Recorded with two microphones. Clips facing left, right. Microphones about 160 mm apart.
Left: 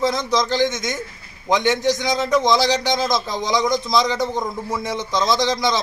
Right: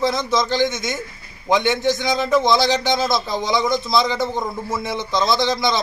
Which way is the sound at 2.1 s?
15° right (ahead or behind).